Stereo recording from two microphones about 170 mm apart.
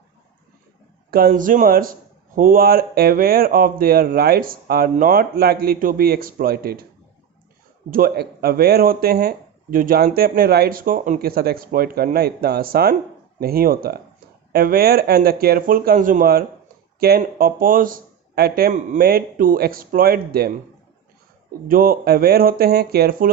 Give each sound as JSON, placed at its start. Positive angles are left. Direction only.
{"t": 1.1, "sound": "speech", "side_deg": -55}
{"t": 7.9, "sound": "speech", "side_deg": -55}
{"t": 21.7, "sound": "speech", "side_deg": -55}